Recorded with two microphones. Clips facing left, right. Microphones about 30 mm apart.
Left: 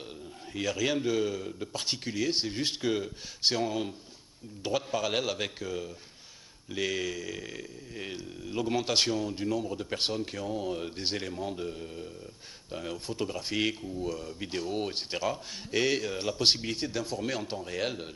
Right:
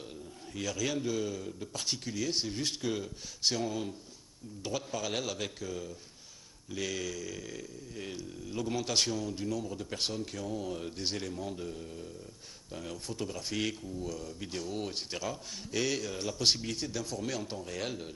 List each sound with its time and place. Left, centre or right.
0.5 s speech: left